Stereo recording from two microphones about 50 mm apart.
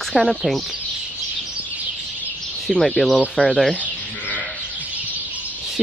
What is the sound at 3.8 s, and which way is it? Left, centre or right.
Sheep, right.